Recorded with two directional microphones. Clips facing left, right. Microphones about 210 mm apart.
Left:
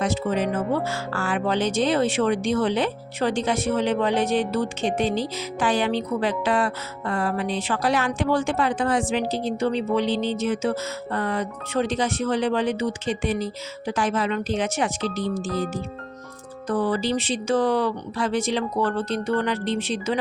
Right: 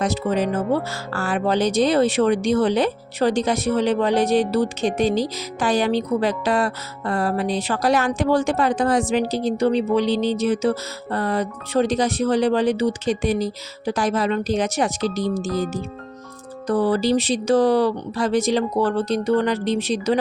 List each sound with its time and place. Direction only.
0.0 s speech: 40° right (ahead or behind)